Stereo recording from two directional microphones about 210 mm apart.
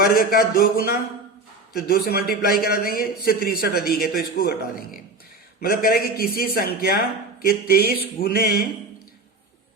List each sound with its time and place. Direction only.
0.2 s a man's voice: 45° left (ahead or behind)